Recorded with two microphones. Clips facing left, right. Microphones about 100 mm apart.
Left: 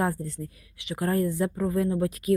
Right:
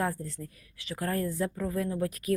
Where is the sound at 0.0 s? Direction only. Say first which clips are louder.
Left 4 dB; 30° left (ahead or behind).